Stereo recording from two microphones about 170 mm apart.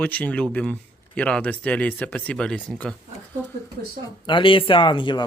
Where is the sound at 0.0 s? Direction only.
10° left (ahead or behind).